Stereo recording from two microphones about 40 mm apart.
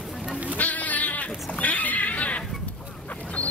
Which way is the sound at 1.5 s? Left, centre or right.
Left.